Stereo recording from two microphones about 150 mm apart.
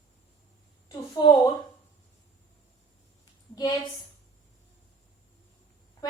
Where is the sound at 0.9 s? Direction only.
30° left (ahead or behind).